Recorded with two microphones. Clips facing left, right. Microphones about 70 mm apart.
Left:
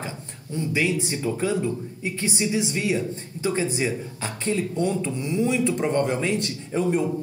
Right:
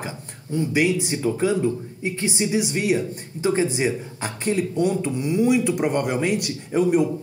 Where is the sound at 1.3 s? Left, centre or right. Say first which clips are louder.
Right 4 dB; right.